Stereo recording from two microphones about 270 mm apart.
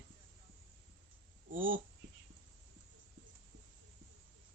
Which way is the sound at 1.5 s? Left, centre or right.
Right.